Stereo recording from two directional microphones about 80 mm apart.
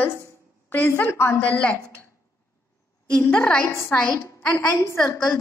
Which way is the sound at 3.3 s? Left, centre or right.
Centre.